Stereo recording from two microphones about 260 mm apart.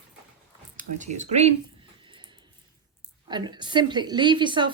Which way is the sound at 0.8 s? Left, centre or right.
Right.